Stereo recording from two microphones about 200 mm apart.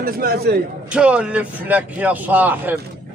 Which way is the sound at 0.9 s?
5° right (ahead or behind).